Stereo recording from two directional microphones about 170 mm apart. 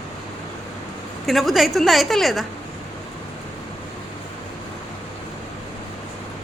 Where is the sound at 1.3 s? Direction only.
Centre (ahead or behind).